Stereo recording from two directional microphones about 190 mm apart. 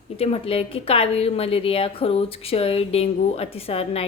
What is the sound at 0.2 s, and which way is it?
A woman's voice, 30° left (ahead or behind).